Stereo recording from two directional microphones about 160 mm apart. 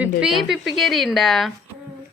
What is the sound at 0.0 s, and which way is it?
A woman's voice, 5° right (ahead or behind).